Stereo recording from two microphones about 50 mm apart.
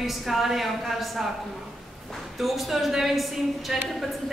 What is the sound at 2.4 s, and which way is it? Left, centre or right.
A woman's voice, centre.